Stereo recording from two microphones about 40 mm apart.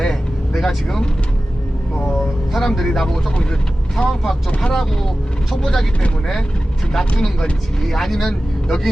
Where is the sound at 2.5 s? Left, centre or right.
Centre.